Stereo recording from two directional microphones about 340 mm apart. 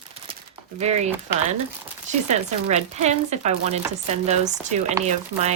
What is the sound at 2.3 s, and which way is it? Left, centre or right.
Chopping, centre.